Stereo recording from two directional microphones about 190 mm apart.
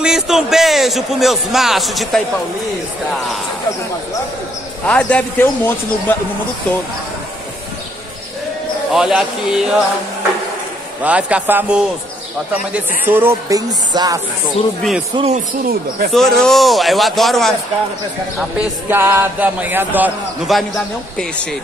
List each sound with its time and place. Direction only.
0.0 s a man's voice: 5° right (ahead or behind)
4.8 s a man's voice: 5° left (ahead or behind)
8.9 s a man's voice: 5° right (ahead or behind)
11.0 s speech: 5° right (ahead or behind)
13.0 s speech: 10° right (ahead or behind)
14.8 s a man's voice: centre (ahead or behind)
15.1 s speech: 30° right (ahead or behind)
16.1 s a man's voice: centre (ahead or behind)
18.6 s speech: 10° right (ahead or behind)